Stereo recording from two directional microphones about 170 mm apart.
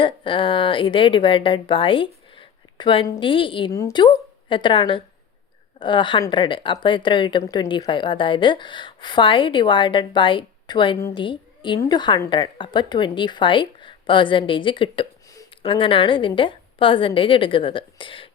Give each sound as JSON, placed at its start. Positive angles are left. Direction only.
{"t": 0.0, "sound": "speech", "side_deg": 30}
{"t": 3.7, "sound": "a woman's voice", "side_deg": 20}